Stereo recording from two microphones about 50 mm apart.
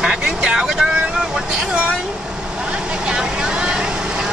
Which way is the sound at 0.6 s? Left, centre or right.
Centre.